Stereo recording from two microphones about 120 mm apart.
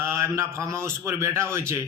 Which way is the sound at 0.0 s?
25° right (ahead or behind).